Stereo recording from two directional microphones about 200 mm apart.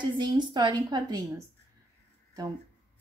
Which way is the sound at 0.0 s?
25° right (ahead or behind).